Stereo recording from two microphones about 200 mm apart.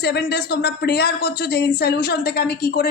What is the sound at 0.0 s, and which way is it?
A woman's voice, 55° left (ahead or behind).